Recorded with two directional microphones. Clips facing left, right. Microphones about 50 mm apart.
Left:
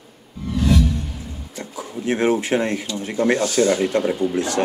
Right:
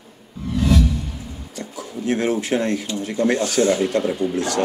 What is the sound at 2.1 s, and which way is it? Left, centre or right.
Speech, left.